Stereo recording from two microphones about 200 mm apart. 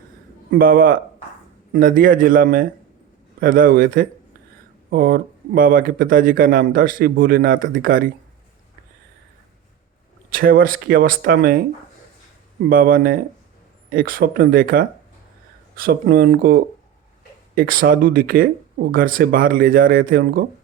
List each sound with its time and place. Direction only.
0.6 s speech: 45° right (ahead or behind)
10.2 s speech: 45° right (ahead or behind)
12.6 s speech: 45° right (ahead or behind)